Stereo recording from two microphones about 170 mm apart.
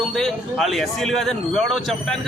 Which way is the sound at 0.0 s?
5° left (ahead or behind).